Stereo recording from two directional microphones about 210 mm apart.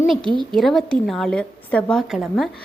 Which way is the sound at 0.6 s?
Centre (ahead or behind).